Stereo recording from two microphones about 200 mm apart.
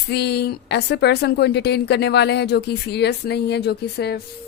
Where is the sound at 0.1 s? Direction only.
55° left (ahead or behind).